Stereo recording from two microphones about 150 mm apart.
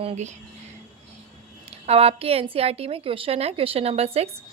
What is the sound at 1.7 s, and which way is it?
A woman's voice, 40° right (ahead or behind).